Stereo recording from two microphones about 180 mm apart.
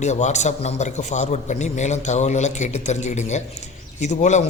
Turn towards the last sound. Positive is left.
turn(degrees=40)  # may be behind; listen again after turning